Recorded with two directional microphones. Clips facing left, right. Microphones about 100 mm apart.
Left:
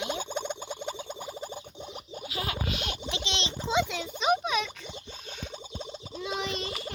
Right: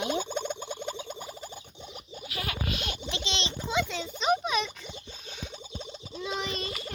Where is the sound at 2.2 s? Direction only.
20° left (ahead or behind).